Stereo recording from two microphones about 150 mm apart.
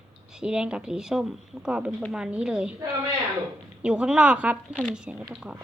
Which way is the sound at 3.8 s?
5° right (ahead or behind).